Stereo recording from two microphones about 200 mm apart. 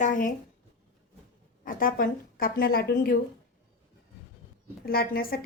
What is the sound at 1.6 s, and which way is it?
A woman's voice, 45° left (ahead or behind).